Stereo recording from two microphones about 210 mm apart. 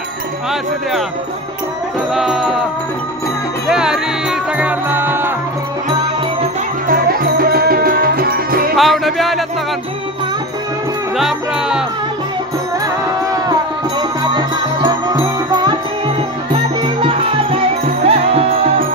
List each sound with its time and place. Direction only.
2.1 s music: centre (ahead or behind)
3.6 s music: 5° right (ahead or behind)
6.9 s music: 45° right (ahead or behind)
8.7 s music: centre (ahead or behind)
11.1 s music: centre (ahead or behind)
13.5 s music: 20° right (ahead or behind)